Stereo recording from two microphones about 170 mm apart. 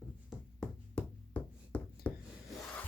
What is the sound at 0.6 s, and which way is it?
Music, 5° left (ahead or behind).